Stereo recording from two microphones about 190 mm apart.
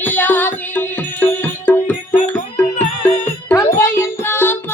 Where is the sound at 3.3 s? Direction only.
15° left (ahead or behind).